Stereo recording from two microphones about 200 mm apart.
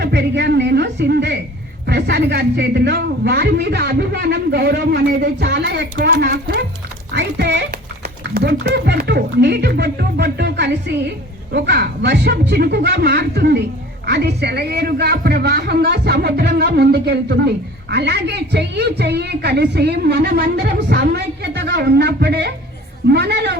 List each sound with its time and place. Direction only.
0.0 s a woman's voice: 55° right (ahead or behind)